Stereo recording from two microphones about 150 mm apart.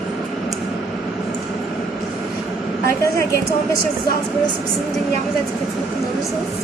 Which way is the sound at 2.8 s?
20° left (ahead or behind).